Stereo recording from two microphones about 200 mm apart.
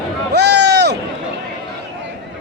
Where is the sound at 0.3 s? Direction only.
55° right (ahead or behind).